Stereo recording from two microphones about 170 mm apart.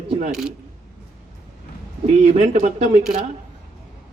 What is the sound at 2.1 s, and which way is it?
Speech, 40° right (ahead or behind).